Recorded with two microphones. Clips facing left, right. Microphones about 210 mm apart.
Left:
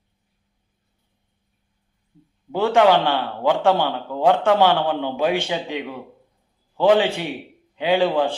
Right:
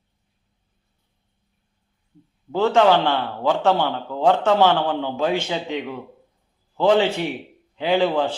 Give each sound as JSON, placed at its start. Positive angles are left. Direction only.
{"t": 2.5, "sound": "a man's voice", "side_deg": 15}